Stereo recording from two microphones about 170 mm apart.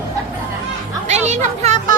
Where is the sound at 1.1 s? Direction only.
40° right (ahead or behind).